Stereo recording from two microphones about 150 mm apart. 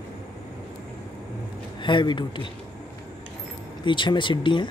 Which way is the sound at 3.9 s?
30° left (ahead or behind).